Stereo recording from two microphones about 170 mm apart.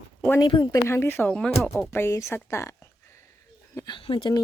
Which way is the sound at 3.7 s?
30° left (ahead or behind).